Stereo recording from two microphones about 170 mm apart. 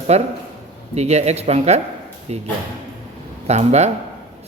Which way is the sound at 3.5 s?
40° right (ahead or behind).